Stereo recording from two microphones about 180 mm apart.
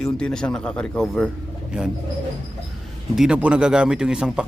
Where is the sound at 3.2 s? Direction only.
5° right (ahead or behind).